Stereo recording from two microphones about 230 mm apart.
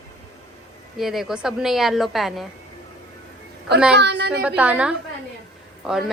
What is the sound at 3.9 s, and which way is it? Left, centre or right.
Speech, right.